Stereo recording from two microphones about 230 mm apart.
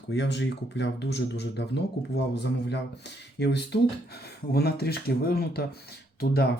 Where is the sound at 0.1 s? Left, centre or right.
Left.